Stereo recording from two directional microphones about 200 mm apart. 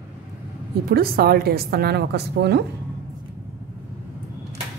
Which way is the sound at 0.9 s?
50° right (ahead or behind).